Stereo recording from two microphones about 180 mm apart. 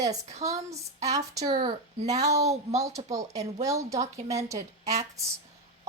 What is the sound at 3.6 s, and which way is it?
A woman's voice, 15° right (ahead or behind).